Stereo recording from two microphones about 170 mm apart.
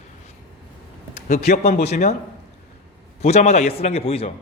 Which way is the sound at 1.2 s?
50° left (ahead or behind).